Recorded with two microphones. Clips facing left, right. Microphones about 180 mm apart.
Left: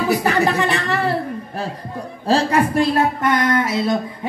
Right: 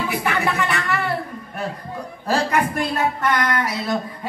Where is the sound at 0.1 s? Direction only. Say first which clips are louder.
Left 5 dB; 35° left (ahead or behind).